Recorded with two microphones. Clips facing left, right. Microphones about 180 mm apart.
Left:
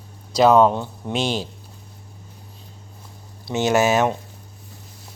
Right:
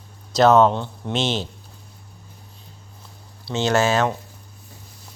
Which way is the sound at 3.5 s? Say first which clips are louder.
Left 1 dB; 15° left (ahead or behind).